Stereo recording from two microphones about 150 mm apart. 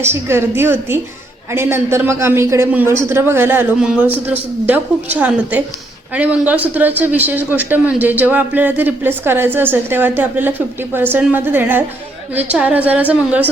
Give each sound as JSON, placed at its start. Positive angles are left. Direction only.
{"t": 0.0, "sound": "a man's voice", "side_deg": -15}